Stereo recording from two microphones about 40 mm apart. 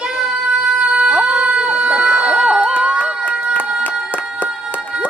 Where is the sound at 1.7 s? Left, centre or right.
Right.